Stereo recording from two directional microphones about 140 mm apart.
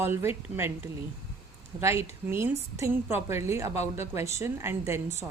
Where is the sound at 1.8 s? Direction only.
20° right (ahead or behind).